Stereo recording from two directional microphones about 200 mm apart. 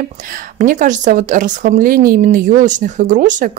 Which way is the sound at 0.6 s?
40° right (ahead or behind).